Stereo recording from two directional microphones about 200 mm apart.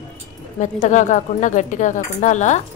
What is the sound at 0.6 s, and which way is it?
Speech, 40° left (ahead or behind).